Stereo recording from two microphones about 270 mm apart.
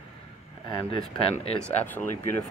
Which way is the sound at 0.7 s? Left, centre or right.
Centre.